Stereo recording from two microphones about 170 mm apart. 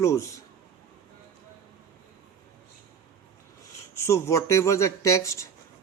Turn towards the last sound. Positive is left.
turn(degrees=20)  # may be behind; listen again after turning